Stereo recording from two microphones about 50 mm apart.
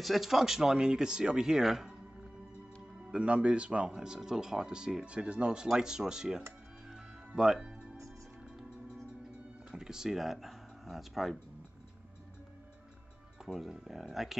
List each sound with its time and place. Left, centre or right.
0.0 s speech: centre
3.1 s speech: right
6.9 s music: centre
9.7 s speech: centre
13.5 s speech: centre